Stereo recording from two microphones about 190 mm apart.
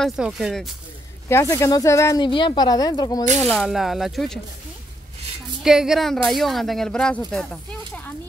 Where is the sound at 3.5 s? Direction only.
Centre (ahead or behind).